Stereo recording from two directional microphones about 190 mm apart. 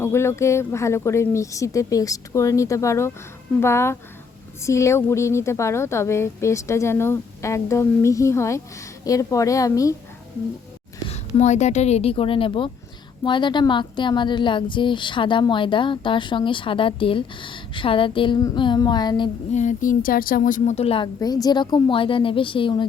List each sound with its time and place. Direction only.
0.0 s a woman's voice: 15° left (ahead or behind)
11.1 s a woman's voice: 35° left (ahead or behind)
19.5 s a woman's voice: 40° left (ahead or behind)